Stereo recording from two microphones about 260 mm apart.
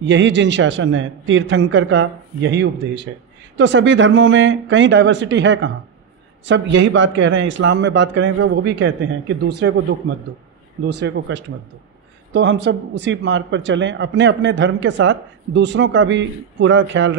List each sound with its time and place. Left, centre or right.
0.0 s speech: right